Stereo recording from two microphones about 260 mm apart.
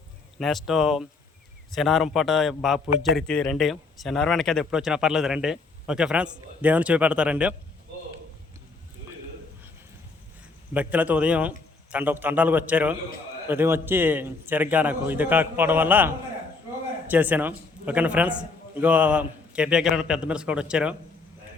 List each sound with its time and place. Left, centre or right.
0.3 s a man's voice: centre
10.8 s a man's voice: centre